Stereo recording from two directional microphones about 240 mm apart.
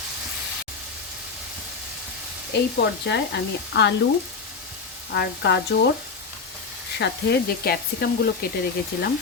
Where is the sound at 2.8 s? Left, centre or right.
Left.